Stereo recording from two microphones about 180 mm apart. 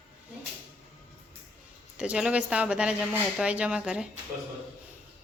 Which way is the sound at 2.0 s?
5° right (ahead or behind).